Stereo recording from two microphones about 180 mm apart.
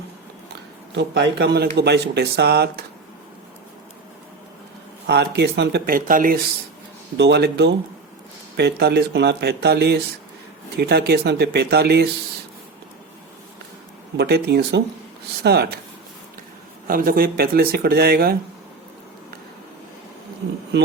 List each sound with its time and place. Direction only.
0.9 s a man's voice: 70° right (ahead or behind)
5.0 s speech: 65° right (ahead or behind); by 6.4 s 50° right (ahead or behind)
7.2 s a man's voice: 70° right (ahead or behind)
14.2 s speech: 65° right (ahead or behind)
16.8 s speech: 55° right (ahead or behind)
20.7 s speech: 70° right (ahead or behind)